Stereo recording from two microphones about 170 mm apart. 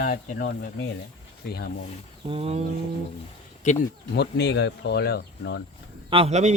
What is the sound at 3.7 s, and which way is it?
Speech, 45° left (ahead or behind).